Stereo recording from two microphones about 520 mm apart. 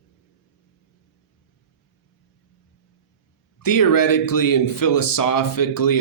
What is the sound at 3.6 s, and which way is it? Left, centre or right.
Speech, left.